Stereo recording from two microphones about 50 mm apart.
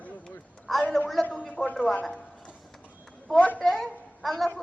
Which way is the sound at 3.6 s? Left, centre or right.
Centre.